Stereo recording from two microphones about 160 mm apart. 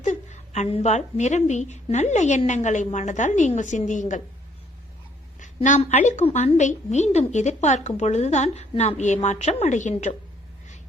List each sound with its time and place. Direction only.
0.0 s a woman's voice: 50° left (ahead or behind)
5.6 s a woman's voice: 45° left (ahead or behind)